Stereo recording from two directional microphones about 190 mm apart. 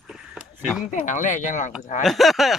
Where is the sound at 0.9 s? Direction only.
40° left (ahead or behind).